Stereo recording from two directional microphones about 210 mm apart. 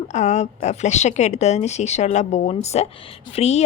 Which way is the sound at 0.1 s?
35° left (ahead or behind).